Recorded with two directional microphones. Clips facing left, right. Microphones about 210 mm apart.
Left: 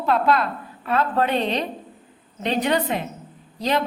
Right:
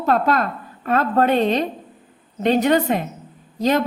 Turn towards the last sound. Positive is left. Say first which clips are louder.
# right 4 dB
turn(degrees=-45)  # may be behind; listen again after turning